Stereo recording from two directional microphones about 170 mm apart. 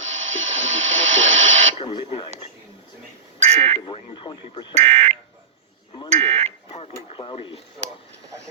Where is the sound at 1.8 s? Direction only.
30° left (ahead or behind).